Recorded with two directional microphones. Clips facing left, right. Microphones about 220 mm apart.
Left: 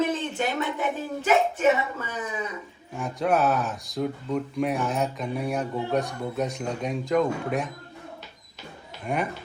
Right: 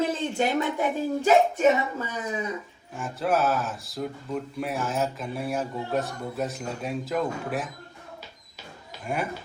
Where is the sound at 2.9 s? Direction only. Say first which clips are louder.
Left 2 dB; centre (ahead or behind).